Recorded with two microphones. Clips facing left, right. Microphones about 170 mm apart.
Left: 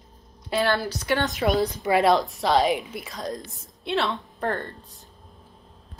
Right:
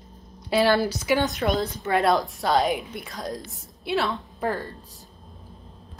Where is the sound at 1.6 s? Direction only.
15° left (ahead or behind).